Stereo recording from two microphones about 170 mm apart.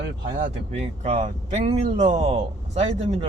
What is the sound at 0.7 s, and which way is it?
Speech, 40° right (ahead or behind).